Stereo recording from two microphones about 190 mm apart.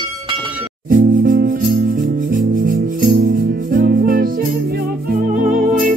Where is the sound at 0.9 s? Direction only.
45° right (ahead or behind).